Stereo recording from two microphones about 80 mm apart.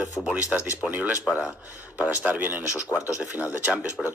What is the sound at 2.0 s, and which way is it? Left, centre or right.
Speech, centre.